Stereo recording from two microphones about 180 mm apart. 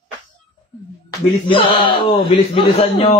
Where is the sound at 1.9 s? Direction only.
30° left (ahead or behind).